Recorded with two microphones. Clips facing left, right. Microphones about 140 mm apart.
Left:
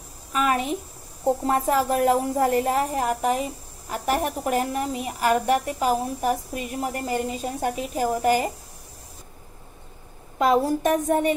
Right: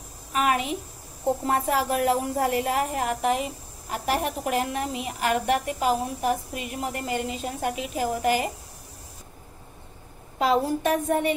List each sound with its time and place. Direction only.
0.3 s speech: 35° left (ahead or behind)
3.9 s speech: 45° left (ahead or behind)
10.4 s a sound: 45° left (ahead or behind)